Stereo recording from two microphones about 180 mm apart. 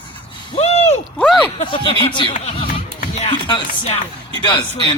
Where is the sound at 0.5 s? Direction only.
40° left (ahead or behind).